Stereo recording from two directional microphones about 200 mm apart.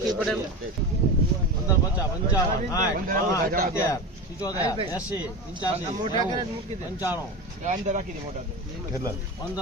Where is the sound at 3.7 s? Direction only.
15° left (ahead or behind).